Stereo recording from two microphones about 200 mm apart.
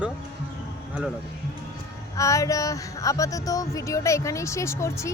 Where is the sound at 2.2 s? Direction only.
15° left (ahead or behind).